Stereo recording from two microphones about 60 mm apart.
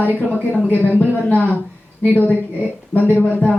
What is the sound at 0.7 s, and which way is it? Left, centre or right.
A woman's voice, left.